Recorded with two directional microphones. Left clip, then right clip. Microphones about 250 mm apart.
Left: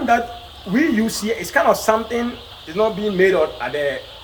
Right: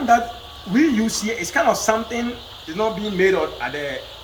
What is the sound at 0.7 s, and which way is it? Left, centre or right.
Speech, left.